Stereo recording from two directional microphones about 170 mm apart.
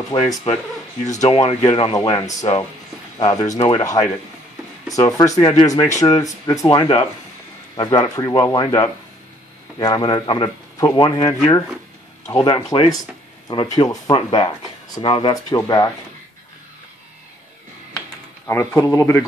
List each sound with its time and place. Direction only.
0.1 s speech: 30° left (ahead or behind)
1.0 s speech: 45° left (ahead or behind)
2.0 s speech: 20° left (ahead or behind)
4.9 s speech: 20° left (ahead or behind)
12.3 s speech: 20° left (ahead or behind)
18.5 s speech: 15° left (ahead or behind)